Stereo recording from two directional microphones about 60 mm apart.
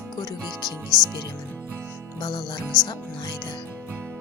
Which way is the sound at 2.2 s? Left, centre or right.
Left.